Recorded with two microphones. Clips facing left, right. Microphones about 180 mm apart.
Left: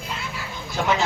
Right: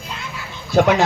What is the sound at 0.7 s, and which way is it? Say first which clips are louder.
Speech: right 9 dB; 65° right (ahead or behind).